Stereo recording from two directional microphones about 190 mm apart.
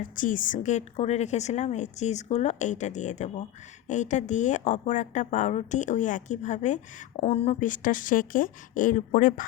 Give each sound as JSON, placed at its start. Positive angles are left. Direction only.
{"t": 0.0, "sound": "a woman's voice", "side_deg": 45}
{"t": 7.7, "sound": "speech", "side_deg": 45}